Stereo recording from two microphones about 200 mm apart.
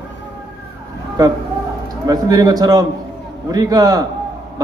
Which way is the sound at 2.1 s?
20° right (ahead or behind).